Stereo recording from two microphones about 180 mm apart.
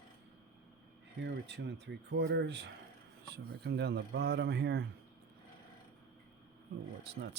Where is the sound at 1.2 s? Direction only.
75° right (ahead or behind).